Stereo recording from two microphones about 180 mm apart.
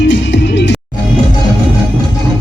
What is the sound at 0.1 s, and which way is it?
Music, 75° left (ahead or behind).